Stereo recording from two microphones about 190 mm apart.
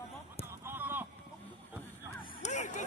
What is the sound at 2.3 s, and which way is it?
Vehicle, 40° left (ahead or behind).